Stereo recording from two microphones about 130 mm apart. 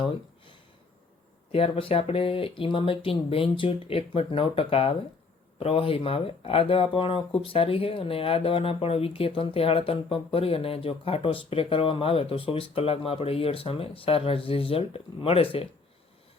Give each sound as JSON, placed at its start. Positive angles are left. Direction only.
{"t": 1.5, "sound": "speech", "side_deg": 45}